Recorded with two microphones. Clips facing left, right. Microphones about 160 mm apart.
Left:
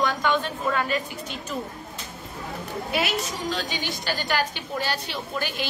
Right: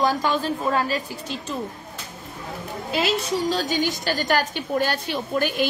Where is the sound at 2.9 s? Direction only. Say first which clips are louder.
Right 5 dB; 30° right (ahead or behind).